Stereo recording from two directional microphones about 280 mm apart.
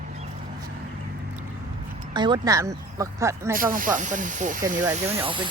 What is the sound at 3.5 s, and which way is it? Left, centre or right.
Speech, right.